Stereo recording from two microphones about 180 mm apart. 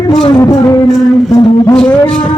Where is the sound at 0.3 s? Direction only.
20° left (ahead or behind).